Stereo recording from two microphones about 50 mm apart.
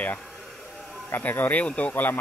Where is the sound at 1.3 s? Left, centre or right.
Left.